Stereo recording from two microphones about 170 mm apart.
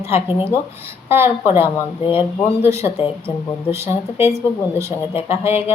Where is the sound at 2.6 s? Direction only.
15° right (ahead or behind).